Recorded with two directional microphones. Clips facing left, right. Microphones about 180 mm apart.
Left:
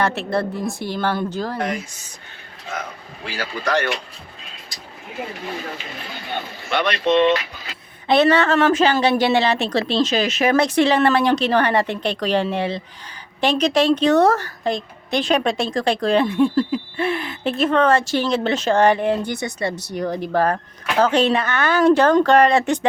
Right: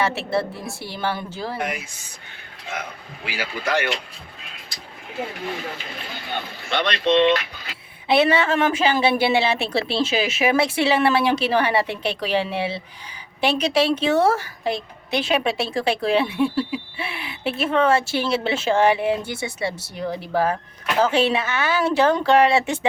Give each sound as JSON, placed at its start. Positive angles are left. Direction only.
{"t": 0.0, "sound": "a woman's voice", "side_deg": -5}
{"t": 3.2, "sound": "a woman's voice", "side_deg": -10}
{"t": 6.7, "sound": "speech", "side_deg": 45}
{"t": 8.0, "sound": "a woman's voice", "side_deg": -5}